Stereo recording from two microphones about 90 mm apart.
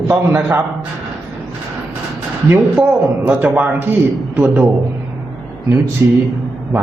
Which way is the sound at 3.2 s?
20° right (ahead or behind).